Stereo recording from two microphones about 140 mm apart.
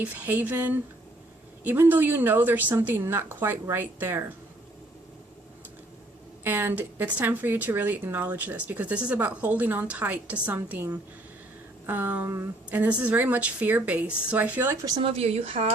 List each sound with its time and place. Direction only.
0.0 s speech: 10° right (ahead or behind)
6.4 s speech: 15° right (ahead or behind)
15.0 s speech: 45° right (ahead or behind)